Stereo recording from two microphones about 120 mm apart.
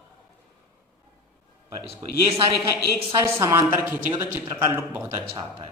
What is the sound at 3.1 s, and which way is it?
A man's voice, 30° right (ahead or behind).